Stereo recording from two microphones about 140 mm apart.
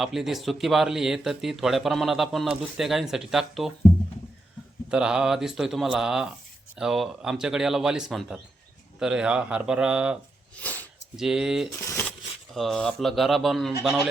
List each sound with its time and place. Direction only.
0.0 s speech: centre (ahead or behind)
4.9 s speech: 5° right (ahead or behind)
10.6 s speech: 10° left (ahead or behind)
11.2 s speech: 5° right (ahead or behind)
11.8 s speech: 20° left (ahead or behind)
12.5 s speech: centre (ahead or behind)